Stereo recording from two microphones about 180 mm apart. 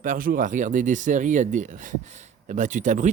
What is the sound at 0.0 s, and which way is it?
Speech, 50° right (ahead or behind).